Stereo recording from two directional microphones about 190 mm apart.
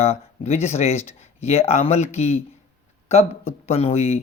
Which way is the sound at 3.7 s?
35° left (ahead or behind).